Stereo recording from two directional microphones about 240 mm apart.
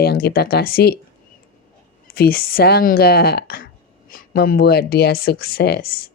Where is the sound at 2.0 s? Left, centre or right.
Left.